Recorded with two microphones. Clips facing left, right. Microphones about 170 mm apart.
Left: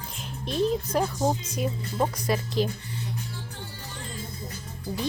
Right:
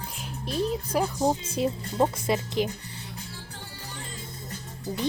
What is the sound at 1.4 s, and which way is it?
Speech, 25° right (ahead or behind).